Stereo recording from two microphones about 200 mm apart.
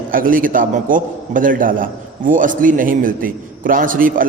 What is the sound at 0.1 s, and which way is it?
A man's voice, 45° right (ahead or behind).